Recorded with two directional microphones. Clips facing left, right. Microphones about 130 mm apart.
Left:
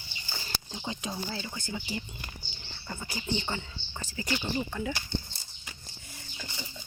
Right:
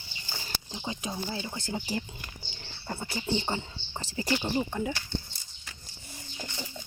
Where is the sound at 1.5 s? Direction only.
40° right (ahead or behind).